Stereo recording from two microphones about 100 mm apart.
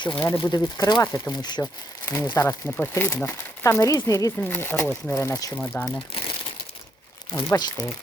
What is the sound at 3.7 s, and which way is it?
Speech, 30° left (ahead or behind).